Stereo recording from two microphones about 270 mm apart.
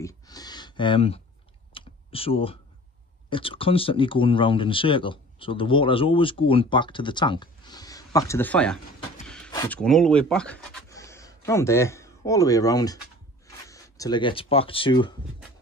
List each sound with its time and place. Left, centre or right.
0.0 s a sound: centre
1.7 s computer keyboard: centre
3.3 s speech: centre